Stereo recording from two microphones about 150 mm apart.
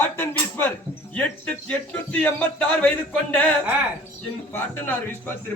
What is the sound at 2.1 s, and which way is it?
Speech, 10° left (ahead or behind).